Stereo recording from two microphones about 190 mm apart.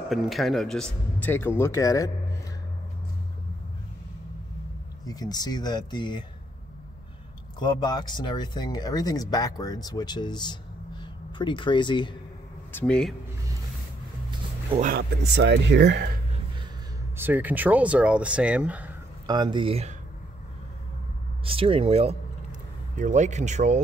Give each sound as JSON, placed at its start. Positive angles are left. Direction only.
{"t": 0.1, "sound": "a man's voice", "side_deg": 0}
{"t": 5.0, "sound": "speech", "side_deg": 20}
{"t": 7.5, "sound": "speech", "side_deg": 20}
{"t": 12.7, "sound": "speech", "side_deg": 5}
{"t": 14.9, "sound": "speech", "side_deg": -60}
{"t": 17.2, "sound": "speech", "side_deg": -10}
{"t": 19.2, "sound": "speech", "side_deg": -25}
{"t": 21.5, "sound": "speech", "side_deg": -30}